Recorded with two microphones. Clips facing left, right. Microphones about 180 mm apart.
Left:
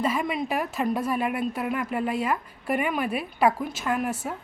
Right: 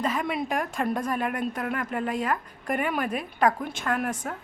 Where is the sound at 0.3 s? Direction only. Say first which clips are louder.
Left 1 dB; 5° left (ahead or behind).